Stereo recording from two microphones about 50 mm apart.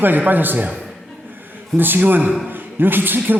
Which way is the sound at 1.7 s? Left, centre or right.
Right.